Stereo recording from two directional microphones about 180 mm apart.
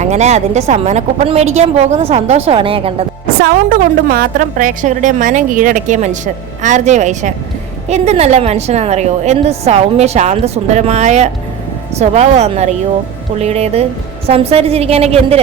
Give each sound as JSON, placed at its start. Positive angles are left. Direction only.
{"t": 0.0, "sound": "a woman's voice", "side_deg": -40}
{"t": 3.2, "sound": "a woman's voice", "side_deg": -55}